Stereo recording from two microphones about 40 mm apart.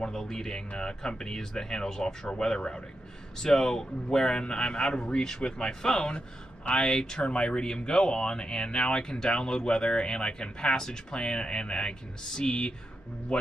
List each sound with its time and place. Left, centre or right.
0.1 s a man's voice: centre